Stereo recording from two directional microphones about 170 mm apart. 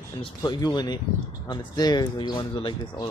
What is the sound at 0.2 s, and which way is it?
Speech, 25° left (ahead or behind).